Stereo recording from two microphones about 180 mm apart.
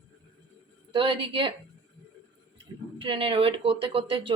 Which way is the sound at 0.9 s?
30° right (ahead or behind).